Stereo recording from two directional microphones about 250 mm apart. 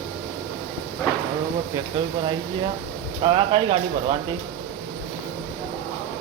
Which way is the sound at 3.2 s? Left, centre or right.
Centre.